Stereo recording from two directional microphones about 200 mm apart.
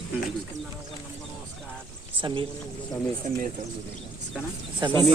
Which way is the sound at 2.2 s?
25° right (ahead or behind).